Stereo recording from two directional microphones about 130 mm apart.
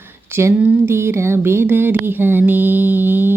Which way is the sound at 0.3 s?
15° right (ahead or behind).